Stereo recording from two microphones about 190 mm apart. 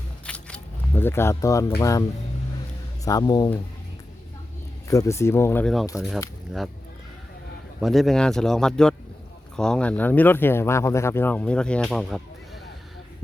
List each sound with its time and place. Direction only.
0.3 s a sound: 5° left (ahead or behind)
1.8 s speech: 15° left (ahead or behind)
4.9 s speech: 15° left (ahead or behind)
7.8 s a man's voice: centre (ahead or behind)